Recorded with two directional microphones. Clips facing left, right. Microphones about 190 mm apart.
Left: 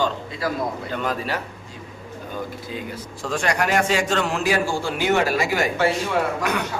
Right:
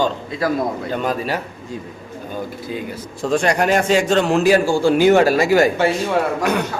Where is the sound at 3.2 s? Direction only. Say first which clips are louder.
Right 6 dB; 25° right (ahead or behind).